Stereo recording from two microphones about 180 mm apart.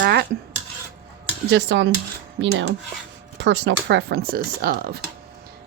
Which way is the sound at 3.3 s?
80° right.